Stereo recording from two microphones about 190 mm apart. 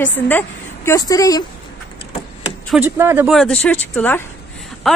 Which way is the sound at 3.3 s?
5° left (ahead or behind).